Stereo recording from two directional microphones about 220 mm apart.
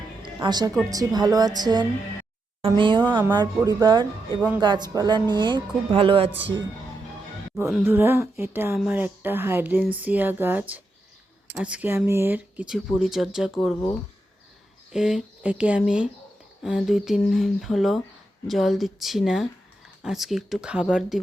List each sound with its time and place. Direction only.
0.2 s music: 20° right (ahead or behind)
0.9 s speech: 15° right (ahead or behind)
4.4 s speech: 5° right (ahead or behind)
4.6 s speech: 20° right (ahead or behind)
7.5 s speech: centre (ahead or behind)